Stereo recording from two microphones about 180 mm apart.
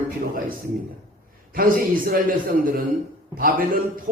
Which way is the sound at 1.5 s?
50° right (ahead or behind).